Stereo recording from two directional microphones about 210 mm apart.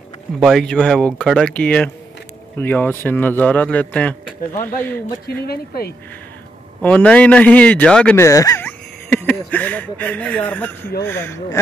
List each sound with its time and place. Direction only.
0.4 s speech: centre (ahead or behind)
5.5 s speech: 50° left (ahead or behind)
6.8 s a man's voice: 5° left (ahead or behind)